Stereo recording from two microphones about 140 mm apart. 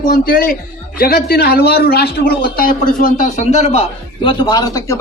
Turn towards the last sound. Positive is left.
turn(degrees=25)  # may be behind; listen again after turning